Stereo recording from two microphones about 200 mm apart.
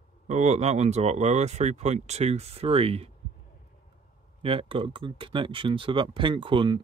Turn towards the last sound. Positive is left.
turn(degrees=-25)  # may be behind; listen again after turning